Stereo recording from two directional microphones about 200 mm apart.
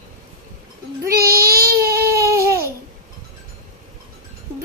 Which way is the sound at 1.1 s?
50° right (ahead or behind).